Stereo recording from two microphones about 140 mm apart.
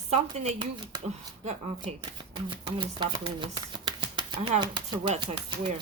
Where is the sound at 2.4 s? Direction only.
35° right (ahead or behind).